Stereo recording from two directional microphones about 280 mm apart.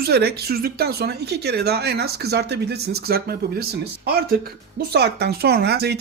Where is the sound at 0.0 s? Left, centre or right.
Right.